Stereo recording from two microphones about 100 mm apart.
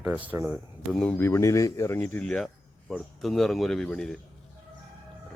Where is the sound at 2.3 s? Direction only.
5° left (ahead or behind).